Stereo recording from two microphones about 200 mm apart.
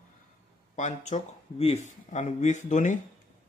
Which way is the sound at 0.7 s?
35° left (ahead or behind).